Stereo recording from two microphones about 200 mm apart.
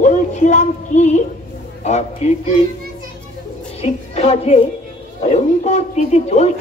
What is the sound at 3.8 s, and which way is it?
A woman's voice, 30° left (ahead or behind).